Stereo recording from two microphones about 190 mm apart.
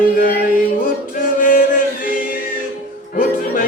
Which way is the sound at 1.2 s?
45° left (ahead or behind).